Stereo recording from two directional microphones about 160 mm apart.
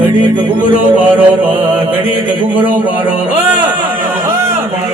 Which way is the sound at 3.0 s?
30° right (ahead or behind).